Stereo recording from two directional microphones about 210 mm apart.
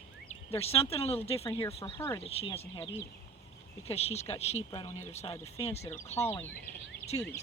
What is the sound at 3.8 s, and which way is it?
Speech, 30° left (ahead or behind).